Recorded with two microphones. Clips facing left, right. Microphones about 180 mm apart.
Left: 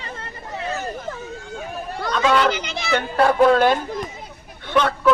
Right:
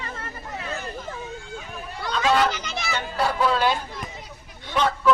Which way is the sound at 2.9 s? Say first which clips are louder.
Left 9 dB; 55° left (ahead or behind).